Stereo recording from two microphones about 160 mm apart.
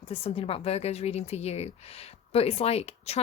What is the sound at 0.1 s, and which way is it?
A woman's voice, 35° left (ahead or behind).